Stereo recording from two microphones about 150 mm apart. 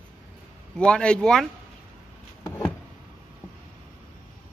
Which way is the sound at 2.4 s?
15° left (ahead or behind).